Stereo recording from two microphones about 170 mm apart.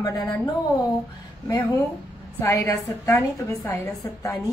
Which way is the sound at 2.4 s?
15° left (ahead or behind).